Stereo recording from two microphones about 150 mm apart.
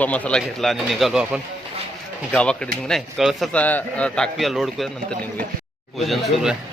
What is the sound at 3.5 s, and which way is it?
A man's voice, 10° left (ahead or behind).